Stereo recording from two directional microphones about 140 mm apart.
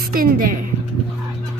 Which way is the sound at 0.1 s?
90° right.